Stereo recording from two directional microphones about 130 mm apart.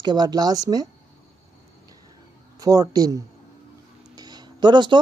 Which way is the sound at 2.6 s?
30° right (ahead or behind).